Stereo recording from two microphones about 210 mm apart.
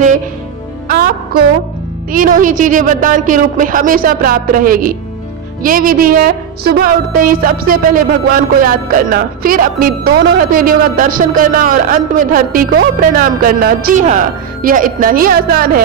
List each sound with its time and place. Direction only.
0.8 s music: 45° right (ahead or behind)
2.1 s a woman's voice: 40° right (ahead or behind)